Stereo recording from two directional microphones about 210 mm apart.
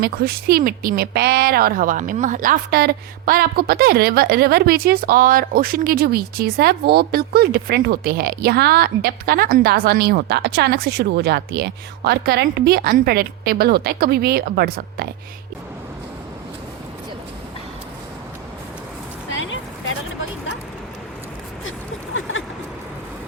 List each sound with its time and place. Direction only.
0.0 s speech: 45° right (ahead or behind)
19.3 s vehicle: 65° left (ahead or behind)
22.1 s a sound: 65° left (ahead or behind)